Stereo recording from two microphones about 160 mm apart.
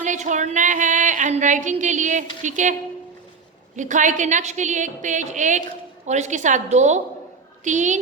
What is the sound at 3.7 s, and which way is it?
A woman's voice, 50° right (ahead or behind).